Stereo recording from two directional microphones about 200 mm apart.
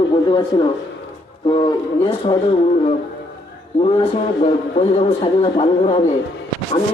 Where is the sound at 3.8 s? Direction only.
30° left (ahead or behind).